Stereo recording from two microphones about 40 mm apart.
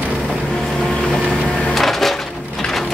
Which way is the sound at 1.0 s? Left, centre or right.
Centre.